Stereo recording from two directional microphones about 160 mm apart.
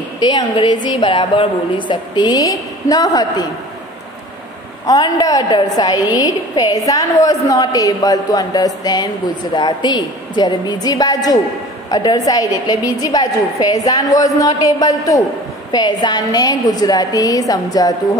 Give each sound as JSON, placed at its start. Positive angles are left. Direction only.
{"t": 0.2, "sound": "a woman's voice", "side_deg": 25}
{"t": 4.8, "sound": "a woman's voice", "side_deg": 25}